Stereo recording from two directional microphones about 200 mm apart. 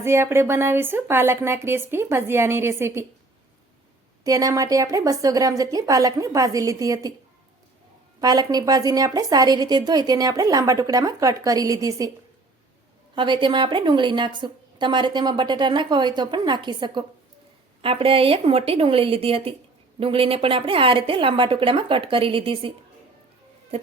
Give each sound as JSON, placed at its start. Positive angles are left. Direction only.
{"t": 0.0, "sound": "a woman's voice", "side_deg": -15}
{"t": 4.2, "sound": "a woman's voice", "side_deg": -15}
{"t": 8.2, "sound": "a woman's voice", "side_deg": -20}
{"t": 13.1, "sound": "a woman's voice", "side_deg": -25}